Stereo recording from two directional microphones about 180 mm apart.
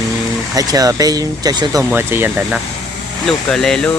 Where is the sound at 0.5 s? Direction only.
20° right (ahead or behind).